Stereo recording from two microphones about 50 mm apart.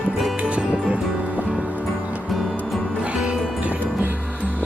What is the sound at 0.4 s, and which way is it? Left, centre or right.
Music, right.